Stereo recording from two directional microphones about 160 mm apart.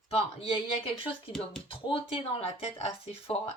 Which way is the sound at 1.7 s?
35° left (ahead or behind).